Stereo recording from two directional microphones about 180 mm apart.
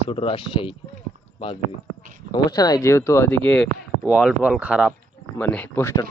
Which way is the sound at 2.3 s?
20° left (ahead or behind).